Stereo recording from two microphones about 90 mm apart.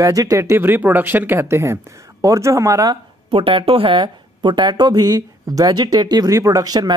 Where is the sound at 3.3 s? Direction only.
85° right.